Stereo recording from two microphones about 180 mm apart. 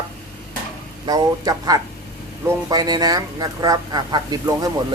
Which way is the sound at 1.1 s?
20° right (ahead or behind).